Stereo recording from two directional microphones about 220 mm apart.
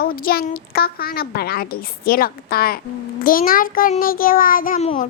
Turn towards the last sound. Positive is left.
turn(degrees=35)  # may be behind; listen again after turning